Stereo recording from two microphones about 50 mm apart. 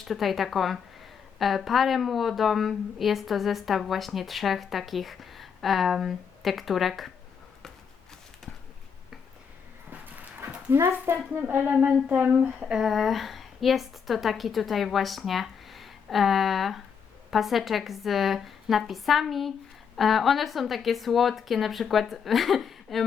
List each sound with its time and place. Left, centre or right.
0.0 s a woman's voice: centre
10.9 s speech: right
11.3 s a sound: right
11.7 s speech: right
12.0 s speech: centre
12.8 s a woman's voice: centre